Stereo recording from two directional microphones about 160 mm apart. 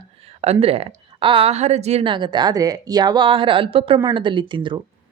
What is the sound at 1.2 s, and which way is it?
A woman's voice, 35° right (ahead or behind).